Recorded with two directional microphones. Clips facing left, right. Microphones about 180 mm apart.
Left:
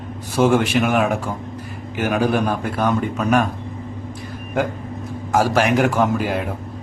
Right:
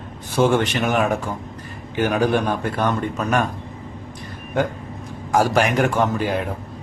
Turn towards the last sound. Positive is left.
turn(degrees=5)  # may be behind; listen again after turning